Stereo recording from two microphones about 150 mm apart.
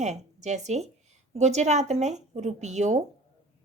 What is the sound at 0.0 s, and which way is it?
Speech, 50° right (ahead or behind).